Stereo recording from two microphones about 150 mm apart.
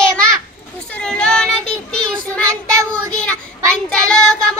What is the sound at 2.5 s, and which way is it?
Child singing, 20° right (ahead or behind).